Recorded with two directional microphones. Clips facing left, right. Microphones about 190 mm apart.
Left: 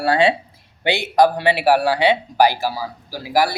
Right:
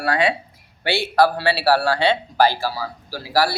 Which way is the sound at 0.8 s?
20° left (ahead or behind).